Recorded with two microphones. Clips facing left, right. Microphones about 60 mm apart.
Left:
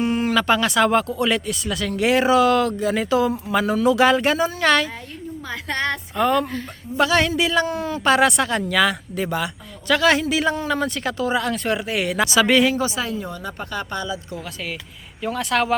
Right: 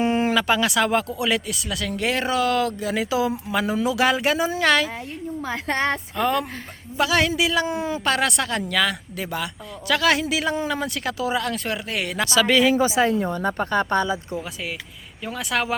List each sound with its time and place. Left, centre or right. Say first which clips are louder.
0.0 s a sound: even; right
0.3 s speech: left 2 dB; centre
5.5 s a woman's voice: right 1 dB; right
6.1 s speech: left 7 dB; centre
7.7 s speech: even; centre
8.0 s speech: left 7 dB; centre
12.7 s a woman's voice: right 3 dB; centre
13.2 s speech: right 6 dB; right
14.3 s speech: right 1 dB; centre
15.2 s speech: left 4 dB; centre